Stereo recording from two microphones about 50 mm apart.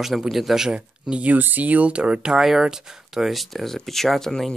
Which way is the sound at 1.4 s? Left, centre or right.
Right.